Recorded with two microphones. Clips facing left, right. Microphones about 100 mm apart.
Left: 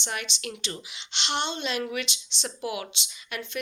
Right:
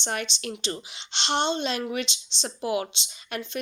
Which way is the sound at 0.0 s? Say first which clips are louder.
Right 3 dB; 35° right (ahead or behind).